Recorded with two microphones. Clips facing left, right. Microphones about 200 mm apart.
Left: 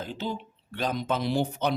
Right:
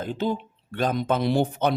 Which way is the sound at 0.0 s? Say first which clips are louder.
Right 6 dB; 50° right (ahead or behind).